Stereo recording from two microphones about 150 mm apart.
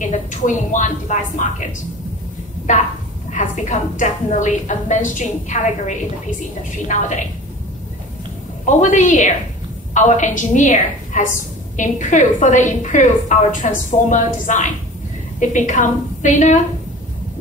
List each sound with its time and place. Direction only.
0.0 s a woman's voice: 55° left (ahead or behind)
2.7 s a woman's voice: 55° left (ahead or behind)
8.6 s a woman's voice: 55° left (ahead or behind)